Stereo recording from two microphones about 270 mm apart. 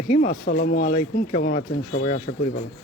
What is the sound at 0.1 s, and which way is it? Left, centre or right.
Speech, left.